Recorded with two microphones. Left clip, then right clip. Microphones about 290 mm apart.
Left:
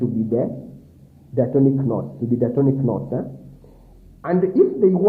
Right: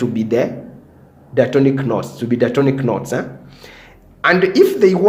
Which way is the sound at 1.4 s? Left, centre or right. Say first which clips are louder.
Right 5 dB; centre.